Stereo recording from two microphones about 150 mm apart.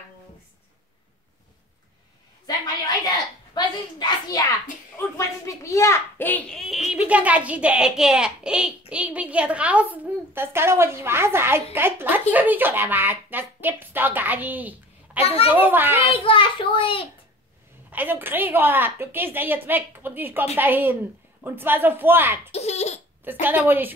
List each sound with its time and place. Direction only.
2.4 s a sound: 25° left (ahead or behind)
6.9 s a child's voice: 10° right (ahead or behind)
15.1 s a child's voice: 40° left (ahead or behind)
15.5 s speech: 15° right (ahead or behind)
16.1 s a child's voice: 35° left (ahead or behind)
17.9 s speech: 15° right (ahead or behind)
22.5 s speech: 45° left (ahead or behind)
23.4 s speech: 10° right (ahead or behind)